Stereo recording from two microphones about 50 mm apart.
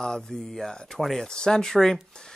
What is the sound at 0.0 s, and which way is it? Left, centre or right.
Speech, centre.